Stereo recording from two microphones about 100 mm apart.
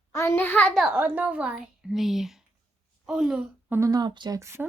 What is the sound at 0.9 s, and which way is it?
A woman's voice, 15° right (ahead or behind).